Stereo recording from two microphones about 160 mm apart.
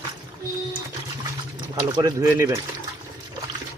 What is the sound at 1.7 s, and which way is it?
Speech, 25° right (ahead or behind).